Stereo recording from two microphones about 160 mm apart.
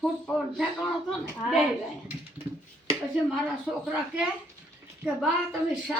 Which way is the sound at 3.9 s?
10° right (ahead or behind).